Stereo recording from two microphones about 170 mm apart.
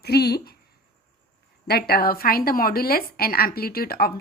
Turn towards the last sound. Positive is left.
turn(degrees=60)  # may be behind; listen again after turning